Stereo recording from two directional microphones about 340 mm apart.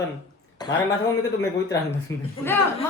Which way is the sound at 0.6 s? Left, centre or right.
Centre.